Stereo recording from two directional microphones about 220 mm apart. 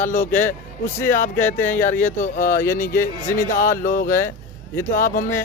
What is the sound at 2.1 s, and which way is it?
Speech, 35° left (ahead or behind).